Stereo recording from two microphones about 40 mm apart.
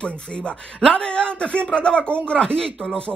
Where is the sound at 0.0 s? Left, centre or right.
Left.